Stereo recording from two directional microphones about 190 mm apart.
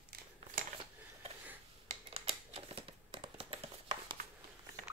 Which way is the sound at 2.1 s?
30° right (ahead or behind).